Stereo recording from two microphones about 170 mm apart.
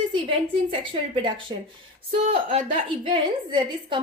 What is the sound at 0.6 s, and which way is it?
A woman's voice, 30° right (ahead or behind).